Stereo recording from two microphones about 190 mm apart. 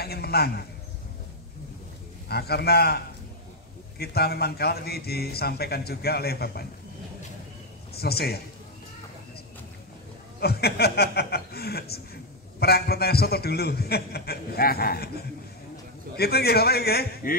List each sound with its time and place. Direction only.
0.0 s a sound: 55° left (ahead or behind)
2.2 s a man's voice: 55° left (ahead or behind)
4.0 s a man's voice: 55° left (ahead or behind)
7.9 s a man's voice: 55° left (ahead or behind)
10.4 s a man's voice: 55° left (ahead or behind)
16.2 s a man's voice: 55° left (ahead or behind)